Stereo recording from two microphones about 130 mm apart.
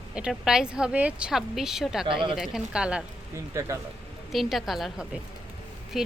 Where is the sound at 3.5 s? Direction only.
20° right (ahead or behind).